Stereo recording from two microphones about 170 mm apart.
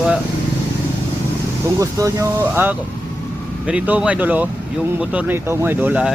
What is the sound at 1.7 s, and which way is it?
Speech, 20° right (ahead or behind).